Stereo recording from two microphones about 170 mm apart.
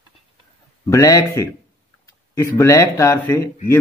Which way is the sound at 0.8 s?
20° left (ahead or behind).